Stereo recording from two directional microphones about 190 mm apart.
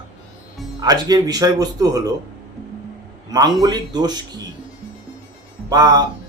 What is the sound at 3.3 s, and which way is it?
Speech, 20° right (ahead or behind).